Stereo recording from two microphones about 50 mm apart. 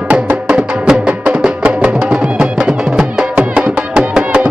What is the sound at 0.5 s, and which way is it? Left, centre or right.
Music, right.